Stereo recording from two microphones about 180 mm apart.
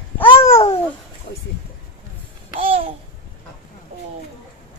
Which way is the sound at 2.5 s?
30° right (ahead or behind).